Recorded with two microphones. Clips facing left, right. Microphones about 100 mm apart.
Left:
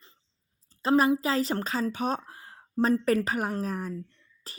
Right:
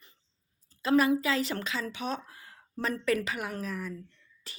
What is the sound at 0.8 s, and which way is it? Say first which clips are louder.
Speech: left 2 dB; 35° left (ahead or behind).